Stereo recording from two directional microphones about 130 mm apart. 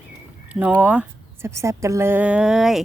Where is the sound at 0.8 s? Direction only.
10° right (ahead or behind).